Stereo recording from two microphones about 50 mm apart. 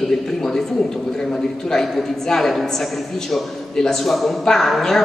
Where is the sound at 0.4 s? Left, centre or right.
Centre.